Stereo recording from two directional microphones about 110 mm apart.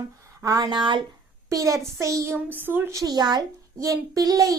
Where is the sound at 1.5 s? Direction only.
30° right (ahead or behind).